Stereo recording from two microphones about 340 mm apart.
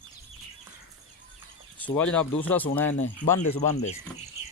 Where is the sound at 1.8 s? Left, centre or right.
Centre.